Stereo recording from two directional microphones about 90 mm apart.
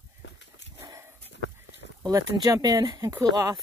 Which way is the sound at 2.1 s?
45° right (ahead or behind).